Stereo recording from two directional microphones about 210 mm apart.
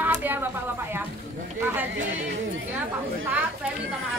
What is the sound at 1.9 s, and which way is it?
Speech, 65° right (ahead or behind).